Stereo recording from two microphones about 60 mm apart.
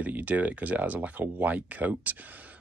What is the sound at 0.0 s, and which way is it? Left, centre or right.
Speech, right.